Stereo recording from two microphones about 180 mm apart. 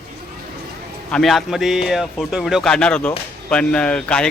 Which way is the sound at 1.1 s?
Centre (ahead or behind).